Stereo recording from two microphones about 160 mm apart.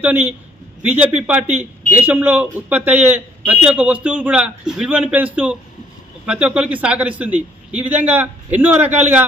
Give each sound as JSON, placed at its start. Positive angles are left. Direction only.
{"t": 0.0, "sound": "a man's voice", "side_deg": -10}